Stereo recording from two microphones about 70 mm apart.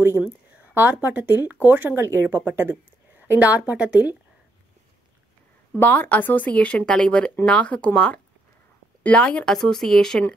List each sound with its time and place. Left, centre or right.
0.7 s a woman's voice: right
5.8 s speech: left; by 10.2 s centre